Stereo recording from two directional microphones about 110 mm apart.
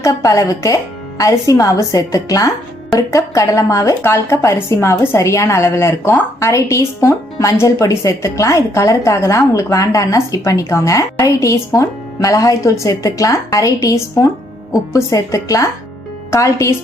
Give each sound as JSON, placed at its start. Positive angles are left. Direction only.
{"t": 0.0, "sound": "a woman's voice", "side_deg": 30}